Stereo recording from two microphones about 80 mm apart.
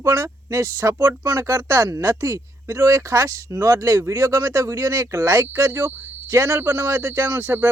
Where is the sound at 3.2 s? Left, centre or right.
Right.